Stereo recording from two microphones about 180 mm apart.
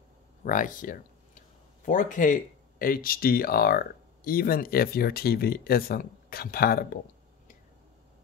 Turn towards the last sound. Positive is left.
turn(degrees=60)  # may be behind; listen again after turning